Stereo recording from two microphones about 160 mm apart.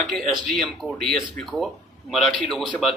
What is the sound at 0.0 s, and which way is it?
Speech, centre (ahead or behind).